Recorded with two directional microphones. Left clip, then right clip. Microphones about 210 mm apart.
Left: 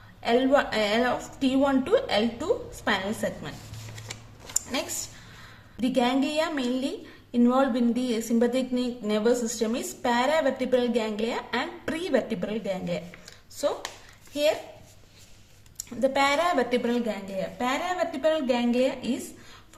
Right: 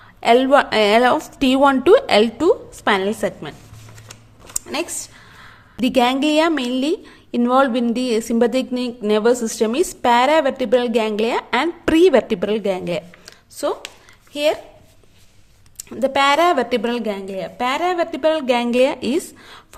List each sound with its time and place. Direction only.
0.2 s a woman's voice: 45° right (ahead or behind)
4.7 s a woman's voice: 45° right (ahead or behind)
13.2 s a sound: 40° right (ahead or behind)
16.0 s a woman's voice: 45° right (ahead or behind)